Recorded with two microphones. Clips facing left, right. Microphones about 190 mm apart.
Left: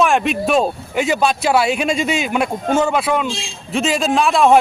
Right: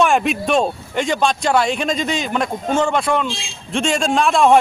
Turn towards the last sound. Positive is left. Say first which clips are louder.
# left 1 dB
turn(degrees=0)  # may be behind; listen again after turning